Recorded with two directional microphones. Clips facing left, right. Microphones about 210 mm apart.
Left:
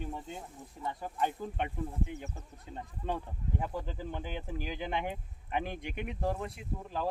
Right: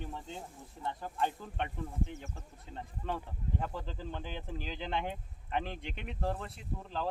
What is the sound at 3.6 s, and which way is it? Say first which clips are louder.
Speech: left 2 dB; 10° left (ahead or behind).